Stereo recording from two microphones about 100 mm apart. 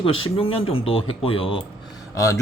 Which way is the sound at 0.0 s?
70° left (ahead or behind).